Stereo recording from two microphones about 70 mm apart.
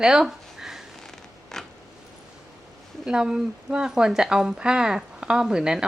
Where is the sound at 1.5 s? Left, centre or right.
Centre.